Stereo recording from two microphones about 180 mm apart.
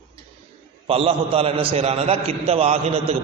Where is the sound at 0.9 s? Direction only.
30° right (ahead or behind).